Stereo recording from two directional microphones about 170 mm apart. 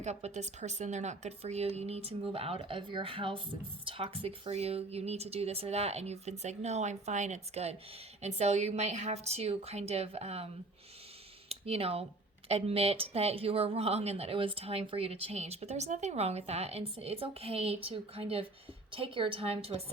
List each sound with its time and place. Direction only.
0.0 s speech: 40° right (ahead or behind)